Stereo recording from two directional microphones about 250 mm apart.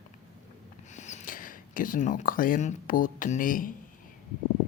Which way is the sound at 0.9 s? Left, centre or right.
Left.